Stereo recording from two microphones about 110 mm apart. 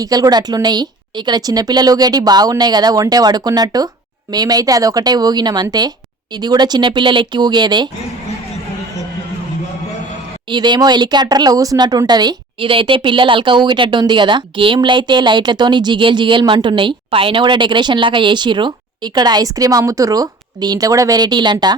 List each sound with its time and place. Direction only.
0.0 s a woman's voice: 35° right (ahead or behind)
10.5 s speech: 45° right (ahead or behind)